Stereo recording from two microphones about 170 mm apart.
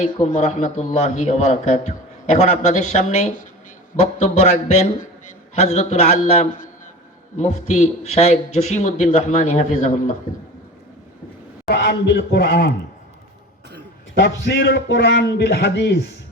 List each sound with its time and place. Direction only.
0.0 s a man's voice: 45° left (ahead or behind)
11.7 s a man's voice: 80° left
14.2 s a man's voice: 85° left